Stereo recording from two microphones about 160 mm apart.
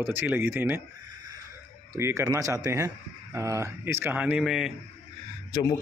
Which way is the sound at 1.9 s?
20° right (ahead or behind).